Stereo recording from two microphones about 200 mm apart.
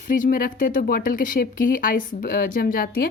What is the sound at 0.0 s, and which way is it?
Speech, 40° left (ahead or behind).